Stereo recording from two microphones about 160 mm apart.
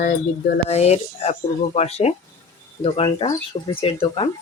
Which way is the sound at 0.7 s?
40° left (ahead or behind).